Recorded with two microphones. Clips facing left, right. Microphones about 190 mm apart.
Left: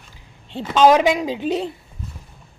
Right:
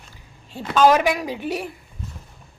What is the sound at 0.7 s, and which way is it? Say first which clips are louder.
Speech: left 2 dB; 20° left (ahead or behind).